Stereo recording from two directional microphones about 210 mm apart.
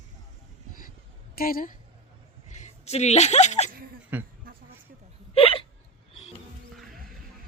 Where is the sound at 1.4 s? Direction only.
45° left (ahead or behind).